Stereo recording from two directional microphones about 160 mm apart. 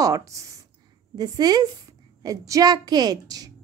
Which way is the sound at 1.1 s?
25° right (ahead or behind).